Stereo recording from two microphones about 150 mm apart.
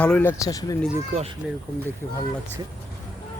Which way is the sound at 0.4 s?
25° left (ahead or behind).